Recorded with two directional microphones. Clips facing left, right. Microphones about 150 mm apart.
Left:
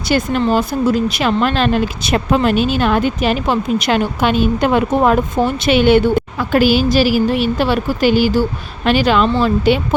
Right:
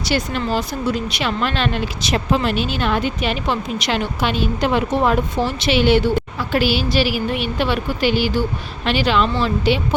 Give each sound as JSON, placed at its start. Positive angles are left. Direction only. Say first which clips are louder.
{"t": 0.1, "sound": "speech", "louder": "left 6 dB", "side_deg": 45}